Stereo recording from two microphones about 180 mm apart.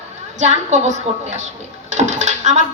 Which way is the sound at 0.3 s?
40° right (ahead or behind).